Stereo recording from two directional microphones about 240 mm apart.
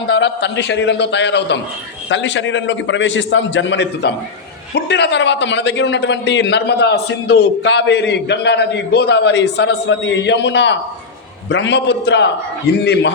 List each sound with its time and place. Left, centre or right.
0.1 s a man's voice: left